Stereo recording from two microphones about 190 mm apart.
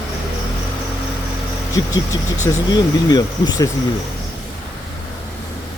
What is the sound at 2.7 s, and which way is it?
Speech, 20° left (ahead or behind).